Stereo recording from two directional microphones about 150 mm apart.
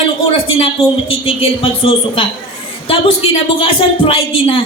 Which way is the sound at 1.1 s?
35° left (ahead or behind).